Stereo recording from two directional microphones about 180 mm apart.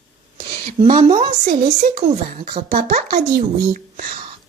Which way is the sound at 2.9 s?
40° right (ahead or behind).